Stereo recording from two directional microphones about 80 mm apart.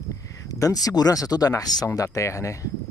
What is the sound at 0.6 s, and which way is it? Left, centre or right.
Speech, left.